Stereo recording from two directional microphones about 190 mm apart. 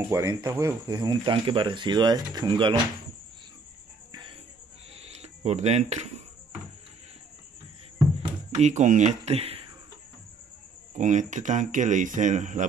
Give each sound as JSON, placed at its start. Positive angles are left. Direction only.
{"t": 0.1, "sound": "speech", "side_deg": -20}
{"t": 4.1, "sound": "a sound", "side_deg": -25}
{"t": 8.2, "sound": "speech", "side_deg": -35}
{"t": 11.0, "sound": "speech", "side_deg": -40}